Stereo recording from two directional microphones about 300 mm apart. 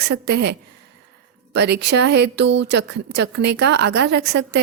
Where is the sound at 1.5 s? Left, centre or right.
Right.